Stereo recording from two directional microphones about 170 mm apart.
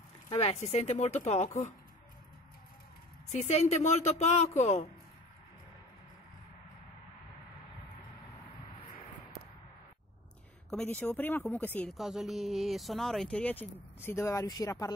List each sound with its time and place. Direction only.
0.3 s speech: 35° left (ahead or behind)
3.3 s speech: 40° left (ahead or behind)
10.7 s speech: 5° left (ahead or behind)
11.9 s speech: centre (ahead or behind); by 14.9 s 20° left (ahead or behind)